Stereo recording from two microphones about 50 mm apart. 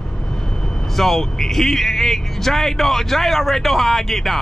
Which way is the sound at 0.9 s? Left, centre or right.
Centre.